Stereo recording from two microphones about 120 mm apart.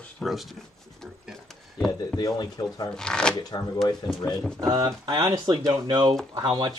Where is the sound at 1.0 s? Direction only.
5° left (ahead or behind).